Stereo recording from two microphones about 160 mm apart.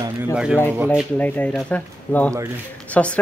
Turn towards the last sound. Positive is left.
turn(degrees=5)  # may be behind; listen again after turning